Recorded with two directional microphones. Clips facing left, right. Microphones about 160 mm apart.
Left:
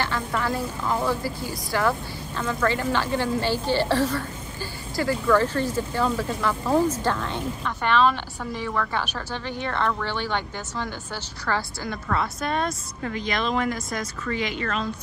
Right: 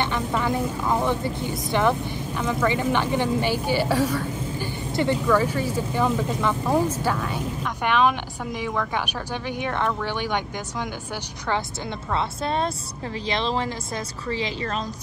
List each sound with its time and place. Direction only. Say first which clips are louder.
0.4 s speech: right 3 dB; 20° right (ahead or behind)
12.1 s speech: right 1 dB; 25° right (ahead or behind)